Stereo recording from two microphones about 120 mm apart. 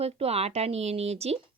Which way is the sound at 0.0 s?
60° right (ahead or behind).